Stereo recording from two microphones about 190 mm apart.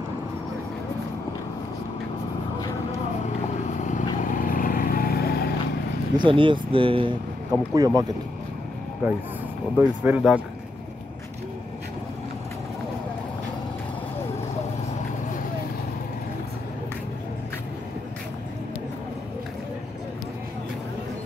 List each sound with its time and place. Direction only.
3.6 s vehicle: 40° left (ahead or behind); by 5.5 s 55° left (ahead or behind)
6.1 s speech: 25° right (ahead or behind)
9.0 s speech: 10° right (ahead or behind)